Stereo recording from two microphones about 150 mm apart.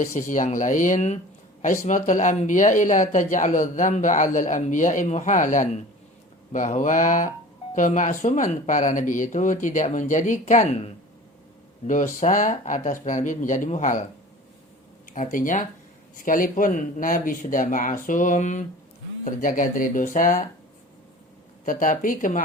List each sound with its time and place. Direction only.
0.0 s speech: 60° left (ahead or behind)
15.1 s speech: 60° left (ahead or behind)
21.6 s speech: 60° left (ahead or behind)